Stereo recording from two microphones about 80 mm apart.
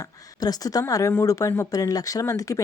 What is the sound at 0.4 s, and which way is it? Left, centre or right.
A woman's voice, left.